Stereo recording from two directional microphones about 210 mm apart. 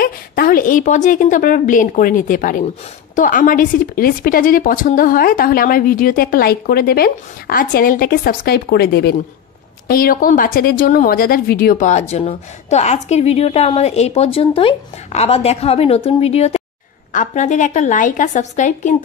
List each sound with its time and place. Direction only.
0.0 s a woman's voice: 45° left (ahead or behind)